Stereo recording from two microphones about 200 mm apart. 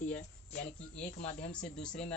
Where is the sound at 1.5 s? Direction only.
5° left (ahead or behind).